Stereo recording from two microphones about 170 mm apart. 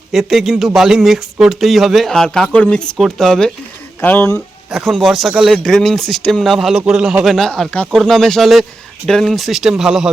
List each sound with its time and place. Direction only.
0.1 s speech: centre (ahead or behind)
4.4 s speech: centre (ahead or behind)